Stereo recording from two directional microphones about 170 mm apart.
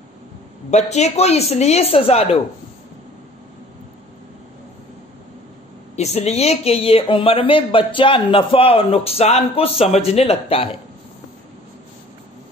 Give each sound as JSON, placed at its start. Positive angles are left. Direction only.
{"t": 0.7, "sound": "speech", "side_deg": 40}
{"t": 5.9, "sound": "speech", "side_deg": 40}